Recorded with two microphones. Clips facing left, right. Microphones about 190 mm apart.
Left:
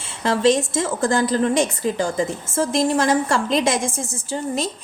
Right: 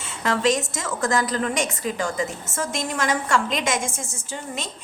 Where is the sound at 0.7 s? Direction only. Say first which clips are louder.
Left 4 dB; 30° left (ahead or behind).